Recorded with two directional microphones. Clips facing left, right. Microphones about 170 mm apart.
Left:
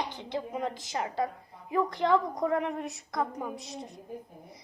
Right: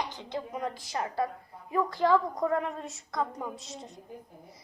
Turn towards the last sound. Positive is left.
turn(degrees=65)  # may be behind; listen again after turning